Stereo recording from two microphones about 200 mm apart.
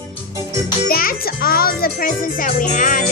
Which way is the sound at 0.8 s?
50° left (ahead or behind).